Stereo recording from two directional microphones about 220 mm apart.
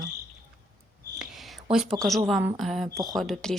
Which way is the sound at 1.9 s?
Centre (ahead or behind).